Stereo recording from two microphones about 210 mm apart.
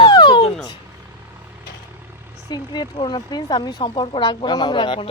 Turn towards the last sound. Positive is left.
turn(degrees=25)  # may be behind; listen again after turning